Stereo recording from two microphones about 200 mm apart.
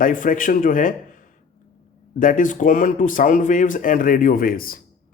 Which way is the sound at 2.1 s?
40° left (ahead or behind).